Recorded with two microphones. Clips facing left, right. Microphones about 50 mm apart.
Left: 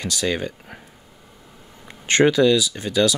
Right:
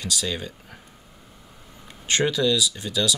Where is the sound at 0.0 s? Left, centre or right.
Left.